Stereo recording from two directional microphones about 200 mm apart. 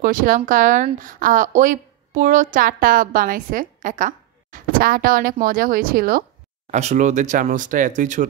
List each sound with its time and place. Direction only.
0.0 s a woman's voice: 45° right (ahead or behind)
6.7 s speech: 35° right (ahead or behind)